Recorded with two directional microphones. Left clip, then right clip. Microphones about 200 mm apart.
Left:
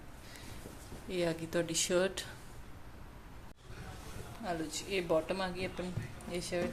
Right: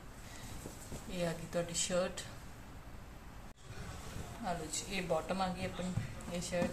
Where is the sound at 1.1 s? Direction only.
55° left (ahead or behind).